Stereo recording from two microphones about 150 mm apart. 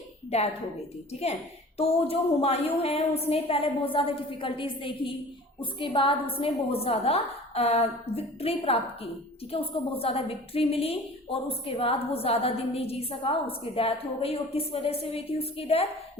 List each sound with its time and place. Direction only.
0.3 s a woman's voice: 45° left (ahead or behind)
1.8 s a woman's voice: 40° left (ahead or behind)